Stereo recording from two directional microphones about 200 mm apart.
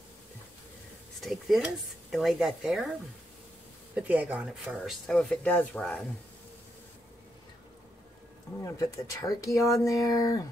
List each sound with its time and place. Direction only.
1.2 s speech: centre (ahead or behind)
8.6 s speech: 15° left (ahead or behind)